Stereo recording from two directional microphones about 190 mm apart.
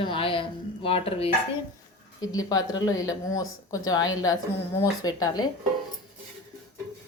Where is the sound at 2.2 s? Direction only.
20° left (ahead or behind).